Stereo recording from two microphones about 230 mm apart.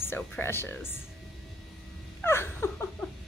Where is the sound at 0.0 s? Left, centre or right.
Centre.